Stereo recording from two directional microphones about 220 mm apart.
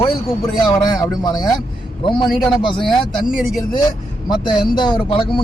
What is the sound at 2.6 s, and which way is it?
Speech, 20° left (ahead or behind).